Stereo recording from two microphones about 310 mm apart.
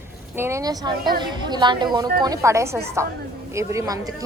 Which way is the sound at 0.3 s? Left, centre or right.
Centre.